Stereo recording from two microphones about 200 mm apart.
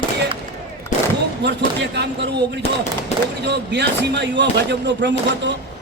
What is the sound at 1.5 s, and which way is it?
Speech, 60° right (ahead or behind).